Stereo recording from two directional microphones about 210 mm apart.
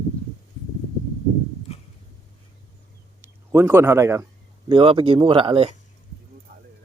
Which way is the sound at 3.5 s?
10° right (ahead or behind).